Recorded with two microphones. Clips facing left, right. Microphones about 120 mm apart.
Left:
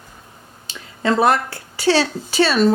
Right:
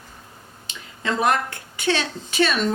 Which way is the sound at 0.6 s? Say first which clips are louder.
Left 7 dB; 35° left (ahead or behind).